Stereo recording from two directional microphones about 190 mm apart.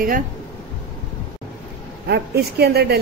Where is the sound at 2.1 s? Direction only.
60° right (ahead or behind).